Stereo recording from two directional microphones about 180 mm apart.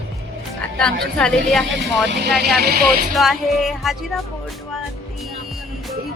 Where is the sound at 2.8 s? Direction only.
Centre (ahead or behind).